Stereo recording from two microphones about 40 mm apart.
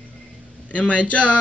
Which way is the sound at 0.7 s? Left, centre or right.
Left.